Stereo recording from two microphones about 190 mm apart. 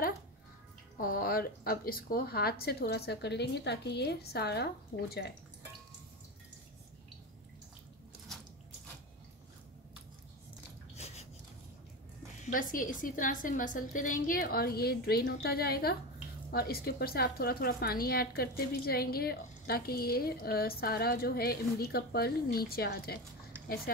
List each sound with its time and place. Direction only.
0.9 s a woman's voice: 50° left (ahead or behind)
11.0 s a sound: 35° left (ahead or behind)
12.4 s a woman's voice: 45° left (ahead or behind)